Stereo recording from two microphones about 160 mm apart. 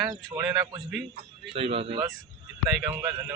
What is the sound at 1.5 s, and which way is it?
Speech, 35° right (ahead or behind).